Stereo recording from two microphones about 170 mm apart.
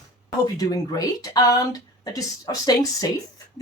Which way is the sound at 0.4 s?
20° left (ahead or behind).